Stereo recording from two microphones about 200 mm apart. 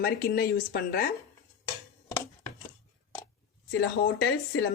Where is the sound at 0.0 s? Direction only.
50° left (ahead or behind).